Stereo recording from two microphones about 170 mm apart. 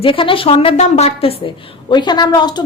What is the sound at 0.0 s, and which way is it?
A woman's voice, 30° left (ahead or behind).